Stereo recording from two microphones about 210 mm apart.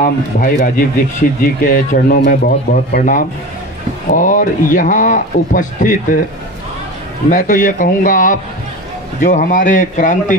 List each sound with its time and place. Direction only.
0.0 s speech: 40° left (ahead or behind)
7.2 s speech: 40° left (ahead or behind)